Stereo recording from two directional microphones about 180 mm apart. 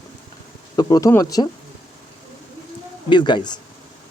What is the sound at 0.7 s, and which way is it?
Speech, 20° left (ahead or behind).